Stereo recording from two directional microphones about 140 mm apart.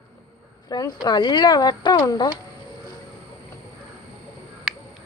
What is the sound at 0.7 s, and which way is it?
Speech, 30° left (ahead or behind).